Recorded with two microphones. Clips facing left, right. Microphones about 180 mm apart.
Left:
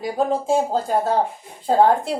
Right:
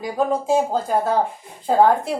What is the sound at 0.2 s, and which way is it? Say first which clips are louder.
Speech: right 1 dB; 30° left (ahead or behind).